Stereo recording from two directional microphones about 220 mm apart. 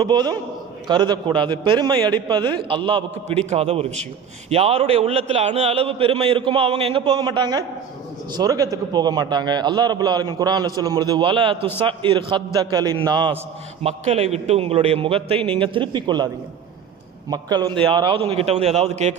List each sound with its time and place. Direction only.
0.0 s a man's voice: 20° right (ahead or behind)